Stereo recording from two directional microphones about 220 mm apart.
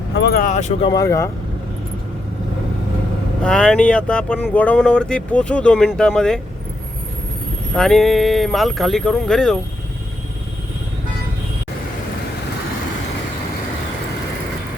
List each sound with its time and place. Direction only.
0.2 s vehicle: 45° left (ahead or behind)
0.9 s speech: 15° left (ahead or behind)
3.4 s speech: 5° left (ahead or behind)
7.7 s speech: centre (ahead or behind)